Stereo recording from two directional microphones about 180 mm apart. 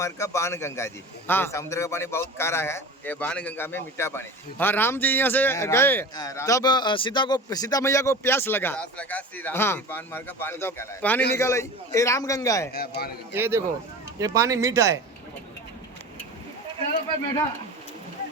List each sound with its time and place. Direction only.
0.0 s a man's voice: 15° left (ahead or behind)
12.7 s a man's voice: 60° left (ahead or behind)
13.3 s speech: 15° right (ahead or behind)